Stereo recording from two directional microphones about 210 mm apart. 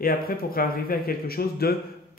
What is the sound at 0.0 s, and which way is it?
Speech, 45° left (ahead or behind).